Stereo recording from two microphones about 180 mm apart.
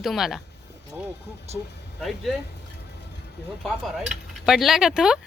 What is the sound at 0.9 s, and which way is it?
Speech, 15° right (ahead or behind).